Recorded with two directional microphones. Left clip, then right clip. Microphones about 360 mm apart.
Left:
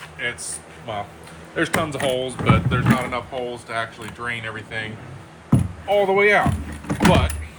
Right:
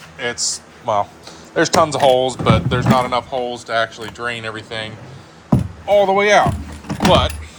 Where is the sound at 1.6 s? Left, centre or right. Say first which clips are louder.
Right 8 dB; centre.